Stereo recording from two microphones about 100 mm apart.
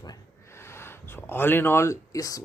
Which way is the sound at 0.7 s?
25° left (ahead or behind).